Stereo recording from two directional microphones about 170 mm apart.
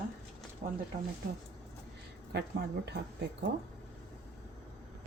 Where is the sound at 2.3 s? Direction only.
80° right.